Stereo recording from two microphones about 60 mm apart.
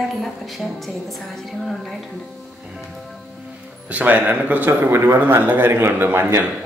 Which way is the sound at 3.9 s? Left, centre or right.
Right.